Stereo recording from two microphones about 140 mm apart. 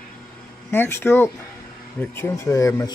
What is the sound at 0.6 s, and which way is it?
Speech, 15° left (ahead or behind).